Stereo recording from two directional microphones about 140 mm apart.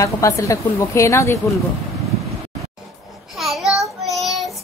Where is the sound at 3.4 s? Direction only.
Centre (ahead or behind).